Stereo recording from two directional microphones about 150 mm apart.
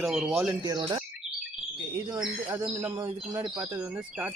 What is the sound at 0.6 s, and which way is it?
Speech, 30° right (ahead or behind).